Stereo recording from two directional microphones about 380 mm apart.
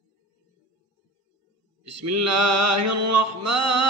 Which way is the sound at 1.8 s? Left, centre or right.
Right.